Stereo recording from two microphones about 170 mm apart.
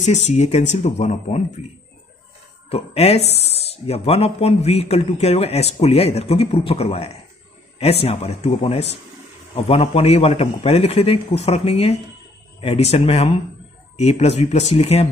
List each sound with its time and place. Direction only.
0.0 s speech: 40° left (ahead or behind)
2.7 s speech: 35° left (ahead or behind)